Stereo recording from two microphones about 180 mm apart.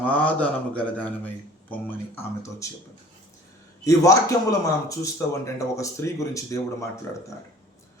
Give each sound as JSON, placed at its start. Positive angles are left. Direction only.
{"t": 0.0, "sound": "speech", "side_deg": 10}
{"t": 3.8, "sound": "speech", "side_deg": 20}